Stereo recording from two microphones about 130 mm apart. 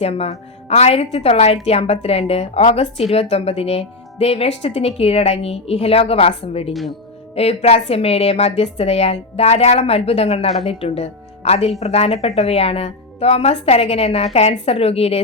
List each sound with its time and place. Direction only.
0.0 s a woman's voice: 50° left (ahead or behind)